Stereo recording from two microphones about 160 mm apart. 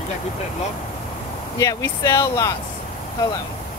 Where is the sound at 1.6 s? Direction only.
20° left (ahead or behind).